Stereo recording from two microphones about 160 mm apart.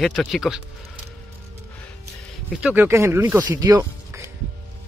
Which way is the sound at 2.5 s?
10° right (ahead or behind).